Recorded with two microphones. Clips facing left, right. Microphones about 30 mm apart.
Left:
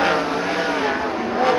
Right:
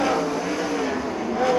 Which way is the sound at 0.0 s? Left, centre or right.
Left.